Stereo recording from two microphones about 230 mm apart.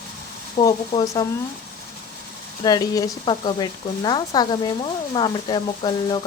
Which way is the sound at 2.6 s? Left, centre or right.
Centre.